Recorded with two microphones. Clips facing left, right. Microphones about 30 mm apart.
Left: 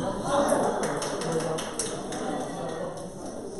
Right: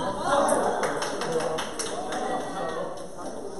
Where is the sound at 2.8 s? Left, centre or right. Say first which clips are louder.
Even; centre.